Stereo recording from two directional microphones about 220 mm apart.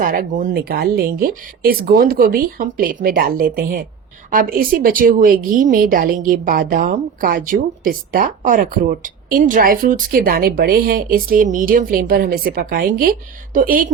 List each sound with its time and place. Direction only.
0.0 s speech: 40° right (ahead or behind)